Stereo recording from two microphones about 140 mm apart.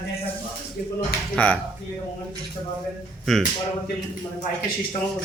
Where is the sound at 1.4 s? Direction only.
10° left (ahead or behind).